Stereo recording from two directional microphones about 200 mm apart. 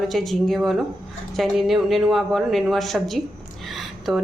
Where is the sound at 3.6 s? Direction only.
Centre (ahead or behind).